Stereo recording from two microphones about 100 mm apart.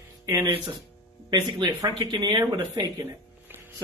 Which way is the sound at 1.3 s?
45° right (ahead or behind).